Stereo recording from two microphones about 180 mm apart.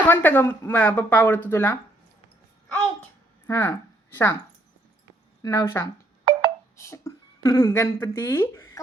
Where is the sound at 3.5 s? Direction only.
10° left (ahead or behind).